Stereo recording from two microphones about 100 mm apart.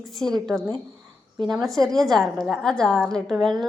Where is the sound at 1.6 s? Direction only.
35° right (ahead or behind).